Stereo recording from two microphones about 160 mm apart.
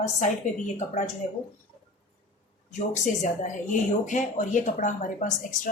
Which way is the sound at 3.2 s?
50° left (ahead or behind).